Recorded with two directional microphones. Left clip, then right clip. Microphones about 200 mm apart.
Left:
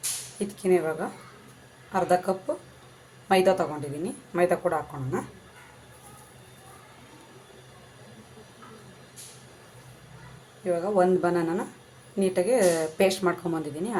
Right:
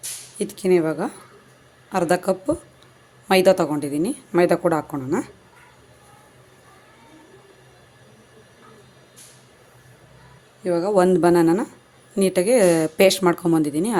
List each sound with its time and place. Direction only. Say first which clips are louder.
0.3 s speech: right 5 dB; 50° right (ahead or behind)
10.6 s speech: right 5 dB; 50° right (ahead or behind)